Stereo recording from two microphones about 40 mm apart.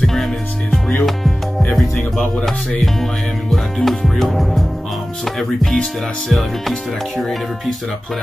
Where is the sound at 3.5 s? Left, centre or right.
Centre.